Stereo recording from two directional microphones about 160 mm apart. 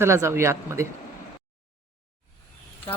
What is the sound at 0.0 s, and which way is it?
Speech, 15° right (ahead or behind).